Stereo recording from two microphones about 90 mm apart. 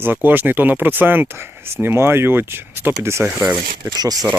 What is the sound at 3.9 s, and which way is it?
Speech, 45° right (ahead or behind).